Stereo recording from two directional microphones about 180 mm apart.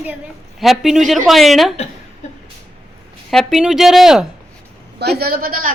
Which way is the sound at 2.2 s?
35° left (ahead or behind).